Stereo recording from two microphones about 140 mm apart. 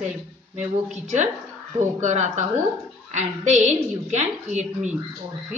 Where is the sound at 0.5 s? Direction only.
60° right (ahead or behind).